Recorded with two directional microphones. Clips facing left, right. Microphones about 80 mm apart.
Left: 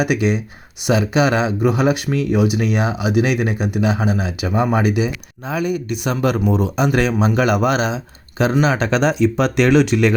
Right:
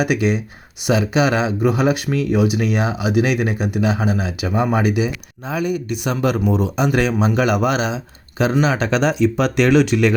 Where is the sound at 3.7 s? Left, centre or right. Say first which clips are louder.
Left 1 dB; left.